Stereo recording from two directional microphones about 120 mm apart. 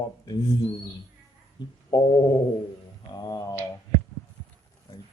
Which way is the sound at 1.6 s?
35° left (ahead or behind).